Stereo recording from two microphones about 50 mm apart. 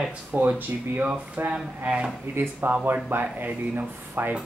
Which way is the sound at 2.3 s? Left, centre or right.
Right.